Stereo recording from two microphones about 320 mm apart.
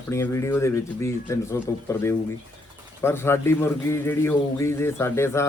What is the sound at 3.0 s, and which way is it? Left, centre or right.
A man's voice, centre.